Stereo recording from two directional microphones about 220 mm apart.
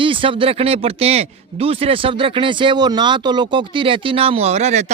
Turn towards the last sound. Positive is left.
turn(degrees=-30)  # may be behind; listen again after turning